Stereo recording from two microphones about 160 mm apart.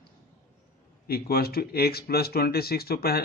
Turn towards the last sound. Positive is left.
turn(degrees=75)  # may be behind; listen again after turning